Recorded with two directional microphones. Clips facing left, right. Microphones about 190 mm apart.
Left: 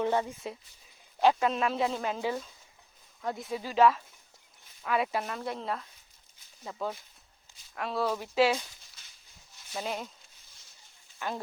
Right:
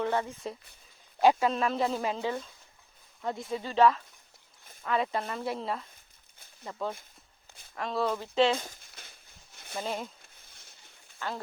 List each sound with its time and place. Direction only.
0.0 s speech: 15° left (ahead or behind)
1.2 s a man's voice: 10° right (ahead or behind)
1.5 s speech: centre (ahead or behind)
2.1 s speech: 10° left (ahead or behind)
8.5 s a sound: 50° right (ahead or behind)
9.7 s speech: 5° left (ahead or behind)
10.3 s a sound: 60° right (ahead or behind)
11.2 s speech: 15° left (ahead or behind)